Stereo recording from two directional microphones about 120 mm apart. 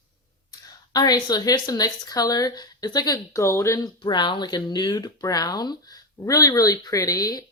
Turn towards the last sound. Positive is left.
turn(degrees=30)  # may be behind; listen again after turning